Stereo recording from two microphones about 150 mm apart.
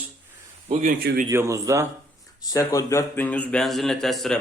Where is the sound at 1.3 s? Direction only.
20° right (ahead or behind).